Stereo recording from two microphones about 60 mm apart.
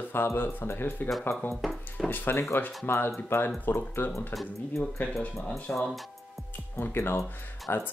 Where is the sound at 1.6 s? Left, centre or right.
Centre.